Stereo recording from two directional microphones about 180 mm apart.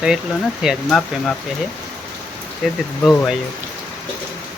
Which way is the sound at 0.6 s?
Centre (ahead or behind).